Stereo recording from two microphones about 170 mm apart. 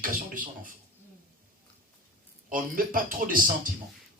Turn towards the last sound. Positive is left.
turn(degrees=-55)  # may be behind; listen again after turning